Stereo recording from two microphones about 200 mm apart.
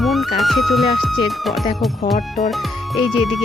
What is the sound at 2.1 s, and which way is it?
Speech, 40° left (ahead or behind).